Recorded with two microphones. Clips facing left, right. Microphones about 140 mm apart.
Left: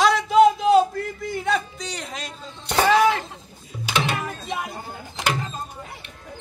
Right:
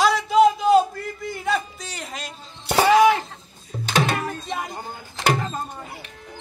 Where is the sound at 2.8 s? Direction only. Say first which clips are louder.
Right 3 dB; 15° right (ahead or behind).